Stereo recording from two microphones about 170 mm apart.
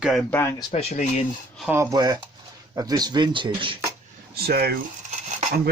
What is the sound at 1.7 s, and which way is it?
Speech, 15° right (ahead or behind).